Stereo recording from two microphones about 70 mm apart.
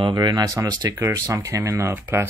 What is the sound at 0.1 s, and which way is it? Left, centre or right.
Speech, right.